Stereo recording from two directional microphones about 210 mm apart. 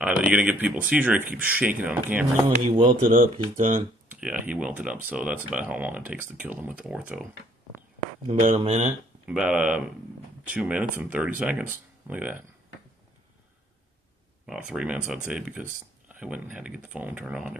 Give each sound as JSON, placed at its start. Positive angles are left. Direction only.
{"t": 0.0, "sound": "speech", "side_deg": -5}
{"t": 2.6, "sound": "speech", "side_deg": -25}
{"t": 3.5, "sound": "speech", "side_deg": -35}
{"t": 4.1, "sound": "speech", "side_deg": -5}
{"t": 8.3, "sound": "speech", "side_deg": -30}
{"t": 9.3, "sound": "speech", "side_deg": -5}
{"t": 14.4, "sound": "speech", "side_deg": -5}